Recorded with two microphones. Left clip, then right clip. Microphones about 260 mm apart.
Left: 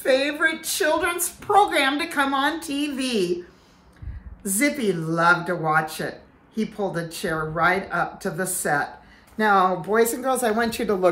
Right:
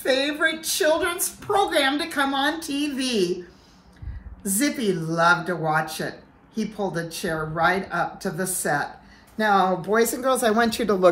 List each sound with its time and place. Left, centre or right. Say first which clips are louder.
0.0 s speech: left 1 dB; centre
4.5 s speech: left 2 dB; centre
10.4 s speech: right 2 dB; right